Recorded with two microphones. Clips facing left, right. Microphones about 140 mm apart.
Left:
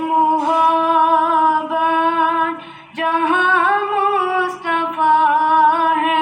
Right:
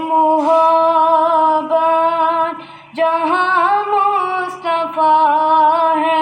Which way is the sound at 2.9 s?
25° right (ahead or behind).